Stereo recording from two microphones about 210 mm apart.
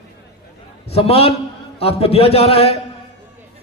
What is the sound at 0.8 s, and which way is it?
A man's voice, 30° left (ahead or behind).